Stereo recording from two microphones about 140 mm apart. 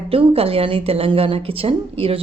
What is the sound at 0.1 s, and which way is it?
A woman's voice, 45° right (ahead or behind).